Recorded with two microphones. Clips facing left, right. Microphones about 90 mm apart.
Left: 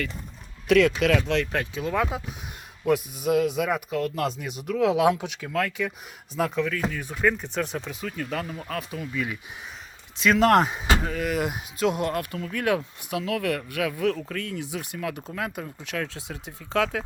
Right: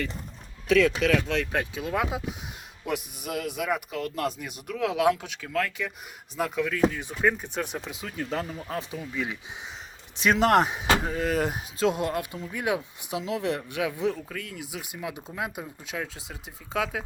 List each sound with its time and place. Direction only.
0.7 s speech: centre (ahead or behind)
1.4 s speech: 15° right (ahead or behind)
3.2 s speech: centre (ahead or behind)
6.7 s speech: 20° right (ahead or behind)
11.1 s speech: 30° right (ahead or behind)
14.2 s speech: 5° right (ahead or behind)